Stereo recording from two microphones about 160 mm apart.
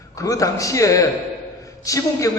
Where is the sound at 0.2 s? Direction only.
20° left (ahead or behind).